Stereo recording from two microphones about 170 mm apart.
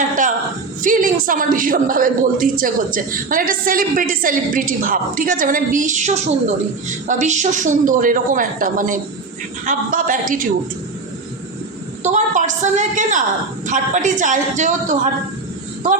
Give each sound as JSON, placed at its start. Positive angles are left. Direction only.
{"t": 0.8, "sound": "a woman's voice", "side_deg": -50}
{"t": 12.0, "sound": "a woman's voice", "side_deg": -45}